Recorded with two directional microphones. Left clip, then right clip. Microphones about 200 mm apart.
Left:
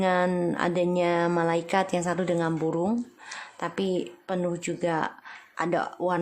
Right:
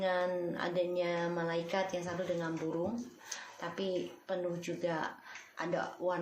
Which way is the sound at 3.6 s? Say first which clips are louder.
Left 8 dB; 45° left (ahead or behind).